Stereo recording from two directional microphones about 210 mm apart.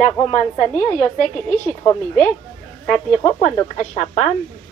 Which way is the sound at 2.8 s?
Centre (ahead or behind).